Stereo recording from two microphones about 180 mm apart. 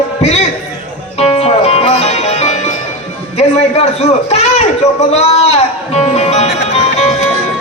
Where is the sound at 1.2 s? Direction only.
35° left (ahead or behind).